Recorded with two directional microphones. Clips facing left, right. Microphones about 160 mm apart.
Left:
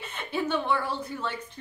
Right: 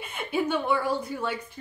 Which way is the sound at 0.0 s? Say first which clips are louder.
Right 3 dB; 10° right (ahead or behind).